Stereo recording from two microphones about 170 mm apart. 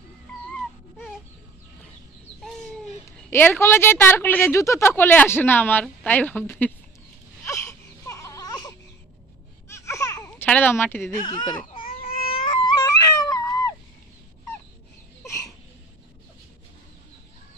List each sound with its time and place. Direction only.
2.4 s bird: 5° left (ahead or behind)
3.1 s a woman's voice: 15° left (ahead or behind)
7.4 s baby cry: 15° left (ahead or behind)
9.7 s laughter: 15° left (ahead or behind)
10.5 s a woman's voice: 10° left (ahead or behind)
11.2 s speech: 25° left (ahead or behind)
11.9 s a sound: 35° left (ahead or behind)